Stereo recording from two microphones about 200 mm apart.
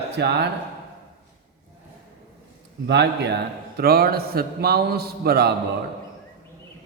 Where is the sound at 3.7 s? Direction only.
50° right (ahead or behind).